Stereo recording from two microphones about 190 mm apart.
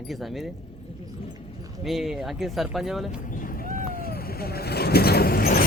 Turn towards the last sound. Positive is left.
turn(degrees=55)  # may be behind; listen again after turning